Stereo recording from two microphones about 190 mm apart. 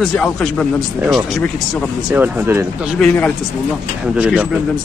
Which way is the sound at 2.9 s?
5° left (ahead or behind).